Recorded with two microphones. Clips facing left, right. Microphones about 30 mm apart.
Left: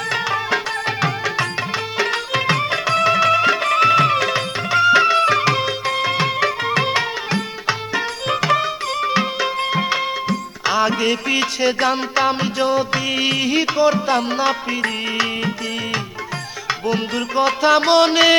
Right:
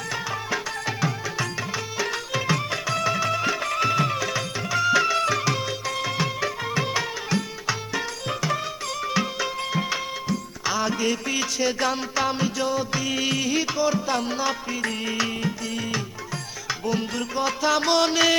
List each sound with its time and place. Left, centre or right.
0.1 s music: left
8.4 s music: left
9.0 s music: left